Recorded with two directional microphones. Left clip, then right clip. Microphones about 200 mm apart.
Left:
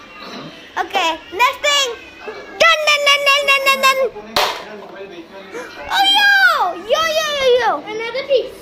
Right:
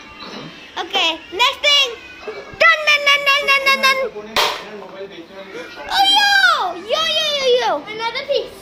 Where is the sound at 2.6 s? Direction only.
25° left (ahead or behind).